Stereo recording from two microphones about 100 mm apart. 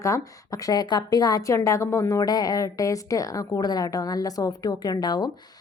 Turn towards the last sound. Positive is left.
turn(degrees=45)  # may be behind; listen again after turning